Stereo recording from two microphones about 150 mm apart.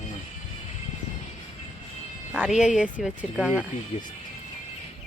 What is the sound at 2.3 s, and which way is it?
Speech, 5° right (ahead or behind).